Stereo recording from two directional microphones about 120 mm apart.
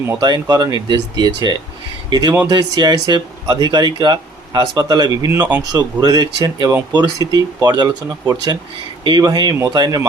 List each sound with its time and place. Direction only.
0.2 s speech: 35° right (ahead or behind)